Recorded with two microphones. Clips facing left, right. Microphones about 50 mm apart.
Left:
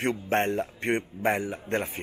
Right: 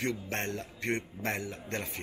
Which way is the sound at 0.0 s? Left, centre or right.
Left.